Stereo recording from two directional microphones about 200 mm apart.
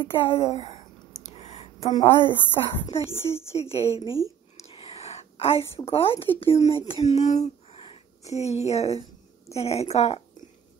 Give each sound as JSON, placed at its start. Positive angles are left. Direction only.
{"t": 0.0, "sound": "a woman's voice", "side_deg": 30}
{"t": 1.3, "sound": "a sound", "side_deg": 30}
{"t": 1.9, "sound": "a woman's voice", "side_deg": 20}
{"t": 4.6, "sound": "whispering", "side_deg": 30}
{"t": 5.9, "sound": "a woman's voice", "side_deg": 30}